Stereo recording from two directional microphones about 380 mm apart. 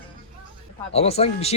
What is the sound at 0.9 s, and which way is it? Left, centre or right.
Speech, centre.